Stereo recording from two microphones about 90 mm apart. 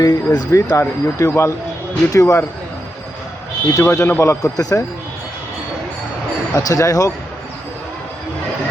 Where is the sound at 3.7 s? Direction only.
30° left (ahead or behind).